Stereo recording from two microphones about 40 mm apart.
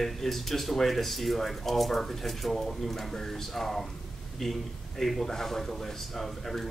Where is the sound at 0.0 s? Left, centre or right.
Centre.